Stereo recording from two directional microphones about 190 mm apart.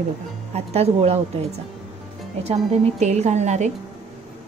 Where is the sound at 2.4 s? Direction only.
35° right (ahead or behind).